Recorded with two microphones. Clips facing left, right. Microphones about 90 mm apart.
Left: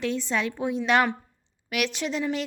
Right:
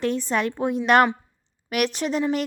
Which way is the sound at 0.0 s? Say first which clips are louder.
Right 4 dB; 45° right (ahead or behind).